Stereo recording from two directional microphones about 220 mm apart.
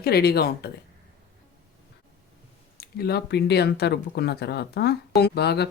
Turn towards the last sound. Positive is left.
turn(degrees=50)  # may be behind; listen again after turning